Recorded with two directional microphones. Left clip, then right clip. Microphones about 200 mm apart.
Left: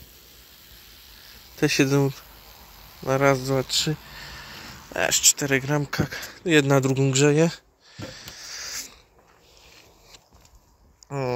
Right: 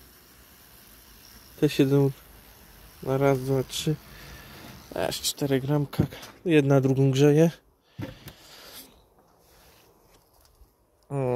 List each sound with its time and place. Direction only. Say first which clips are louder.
1.6 s speech: left 1 dB; 10° right (ahead or behind)
4.9 s speech: left 7 dB; 20° right (ahead or behind)
11.1 s a sound: left 1 dB; 30° right (ahead or behind)